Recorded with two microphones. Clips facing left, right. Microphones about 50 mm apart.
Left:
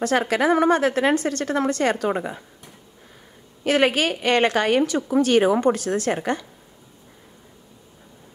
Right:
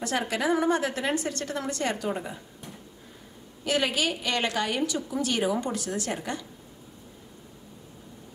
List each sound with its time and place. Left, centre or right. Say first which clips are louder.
0.0 s a woman's voice: left 7 dB; left
3.6 s a woman's voice: left 7 dB; left